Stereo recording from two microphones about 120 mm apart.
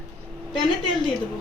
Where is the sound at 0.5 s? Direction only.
45° left (ahead or behind).